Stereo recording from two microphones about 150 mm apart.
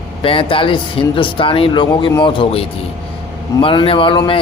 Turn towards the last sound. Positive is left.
turn(degrees=35)  # may be behind; listen again after turning